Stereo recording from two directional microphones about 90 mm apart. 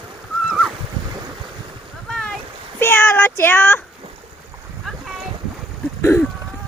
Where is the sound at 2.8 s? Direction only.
25° left (ahead or behind).